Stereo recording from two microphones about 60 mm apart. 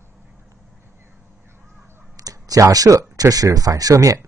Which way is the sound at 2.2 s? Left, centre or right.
Right.